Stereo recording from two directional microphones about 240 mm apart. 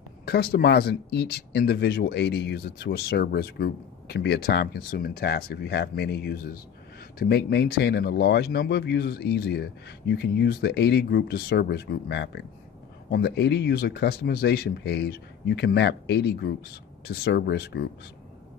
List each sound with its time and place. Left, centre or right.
0.2 s speech: left